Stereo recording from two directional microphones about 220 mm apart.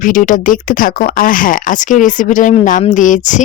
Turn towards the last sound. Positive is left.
turn(degrees=35)  # may be behind; listen again after turning